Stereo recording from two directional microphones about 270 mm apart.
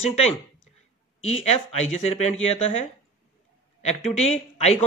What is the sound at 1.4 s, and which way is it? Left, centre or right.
Speech, left.